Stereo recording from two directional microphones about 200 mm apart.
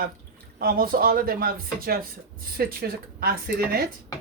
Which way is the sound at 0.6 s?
45° right (ahead or behind).